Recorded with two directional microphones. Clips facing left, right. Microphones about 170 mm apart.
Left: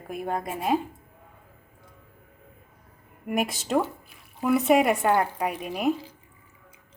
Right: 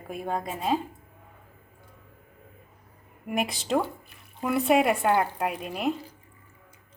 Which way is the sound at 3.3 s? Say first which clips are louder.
Left 1 dB; centre (ahead or behind).